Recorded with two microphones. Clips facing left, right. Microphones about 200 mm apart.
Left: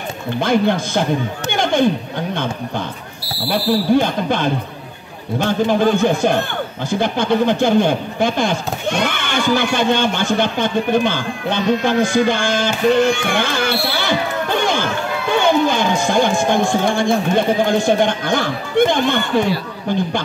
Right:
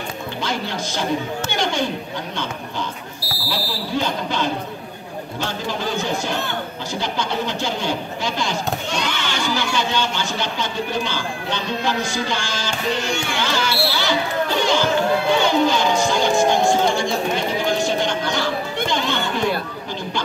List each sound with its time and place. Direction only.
0.4 s speech: 55° left (ahead or behind)
1.5 s a sound: 55° left (ahead or behind)
2.3 s speech: 55° left (ahead or behind)